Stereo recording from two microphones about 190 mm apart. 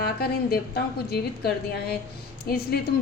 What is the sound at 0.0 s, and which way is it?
A woman's voice, 55° left (ahead or behind).